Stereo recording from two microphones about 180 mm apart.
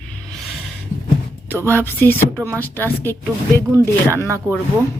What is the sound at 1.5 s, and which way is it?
A woman's voice, 10° left (ahead or behind).